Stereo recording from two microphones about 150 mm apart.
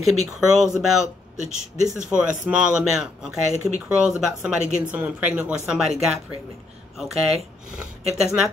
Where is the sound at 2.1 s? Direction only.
5° right (ahead or behind).